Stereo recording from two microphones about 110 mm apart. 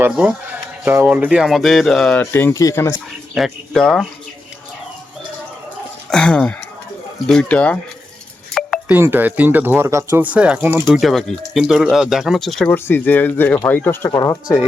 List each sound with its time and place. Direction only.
0.0 s speech: 15° right (ahead or behind); by 2.1 s 5° left (ahead or behind)
2.1 s speech: 20° left (ahead or behind)
2.5 s speech: 30° left (ahead or behind)
3.3 s speech: centre (ahead or behind)
6.1 s speech: 5° left (ahead or behind)
8.9 s speech: 20° right (ahead or behind)
10.8 s speech: centre (ahead or behind)
12.6 s speech: 15° left (ahead or behind)
14.1 s speech: 35° left (ahead or behind)